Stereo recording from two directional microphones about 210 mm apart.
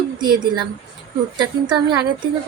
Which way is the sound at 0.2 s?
20° right (ahead or behind).